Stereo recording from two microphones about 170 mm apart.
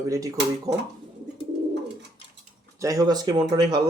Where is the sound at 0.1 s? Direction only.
20° right (ahead or behind).